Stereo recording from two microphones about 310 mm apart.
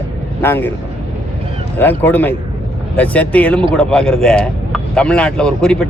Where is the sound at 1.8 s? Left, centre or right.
Centre.